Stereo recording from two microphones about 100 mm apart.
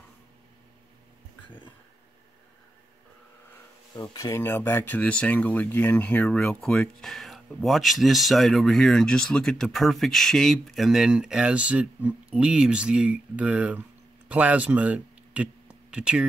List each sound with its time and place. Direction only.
3.9 s speech: 45° left (ahead or behind)
4.3 s speech: 25° left (ahead or behind); by 16.3 s 10° right (ahead or behind)